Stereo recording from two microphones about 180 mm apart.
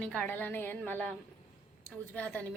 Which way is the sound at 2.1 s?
5° left (ahead or behind).